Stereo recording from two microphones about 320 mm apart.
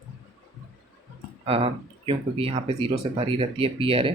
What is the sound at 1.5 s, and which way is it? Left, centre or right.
Speech, centre.